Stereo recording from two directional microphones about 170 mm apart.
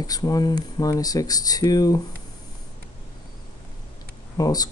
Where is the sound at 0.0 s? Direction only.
20° left (ahead or behind).